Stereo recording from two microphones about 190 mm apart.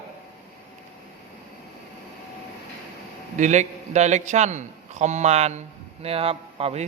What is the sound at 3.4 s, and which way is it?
A man's voice, 40° right (ahead or behind).